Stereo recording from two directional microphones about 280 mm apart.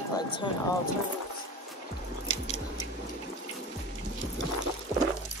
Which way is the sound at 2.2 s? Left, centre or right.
Left.